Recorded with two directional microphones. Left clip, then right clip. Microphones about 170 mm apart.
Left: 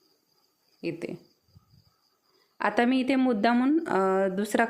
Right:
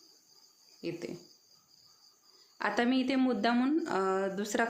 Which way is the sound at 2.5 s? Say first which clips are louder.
Left 5 dB; 35° left (ahead or behind).